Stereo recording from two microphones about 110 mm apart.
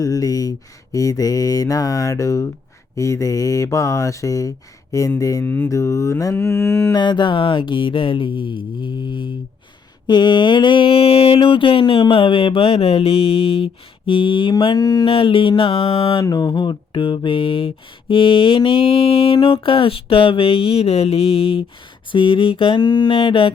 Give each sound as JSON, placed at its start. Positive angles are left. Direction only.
{"t": 0.0, "sound": "speech", "side_deg": 35}
{"t": 0.9, "sound": "mantra", "side_deg": 30}
{"t": 6.9, "sound": "mantra", "side_deg": 40}
{"t": 15.0, "sound": "mantra", "side_deg": 50}
{"t": 16.2, "sound": "mantra", "side_deg": 40}